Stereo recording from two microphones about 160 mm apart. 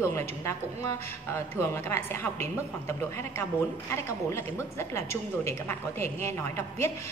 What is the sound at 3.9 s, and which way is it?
A woman's voice, 15° left (ahead or behind).